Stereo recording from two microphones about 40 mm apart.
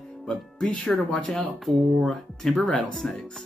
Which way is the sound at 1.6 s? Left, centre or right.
Centre.